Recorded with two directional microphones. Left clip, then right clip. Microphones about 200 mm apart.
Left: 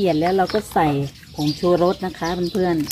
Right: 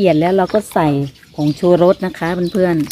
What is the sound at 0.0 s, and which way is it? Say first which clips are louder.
A woman's voice: right 5 dB; 60° right (ahead or behind).